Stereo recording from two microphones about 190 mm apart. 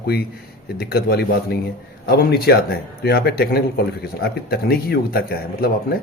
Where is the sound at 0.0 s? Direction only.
55° left (ahead or behind).